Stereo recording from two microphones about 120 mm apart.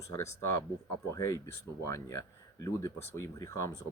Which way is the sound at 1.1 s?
25° left (ahead or behind).